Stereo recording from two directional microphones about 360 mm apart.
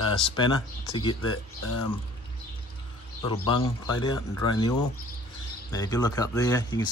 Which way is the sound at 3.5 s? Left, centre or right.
Centre.